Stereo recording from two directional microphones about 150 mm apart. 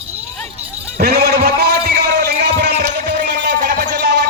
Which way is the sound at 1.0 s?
90° right.